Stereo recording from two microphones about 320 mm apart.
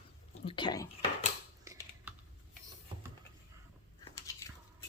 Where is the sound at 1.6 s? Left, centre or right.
Centre.